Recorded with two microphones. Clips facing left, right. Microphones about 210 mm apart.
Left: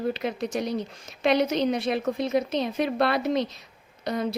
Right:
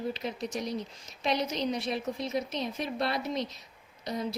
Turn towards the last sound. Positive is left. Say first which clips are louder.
# left 6 dB
turn(degrees=65)  # may be behind; listen again after turning